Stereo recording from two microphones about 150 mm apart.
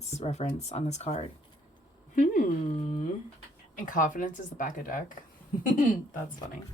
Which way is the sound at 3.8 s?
60° left (ahead or behind).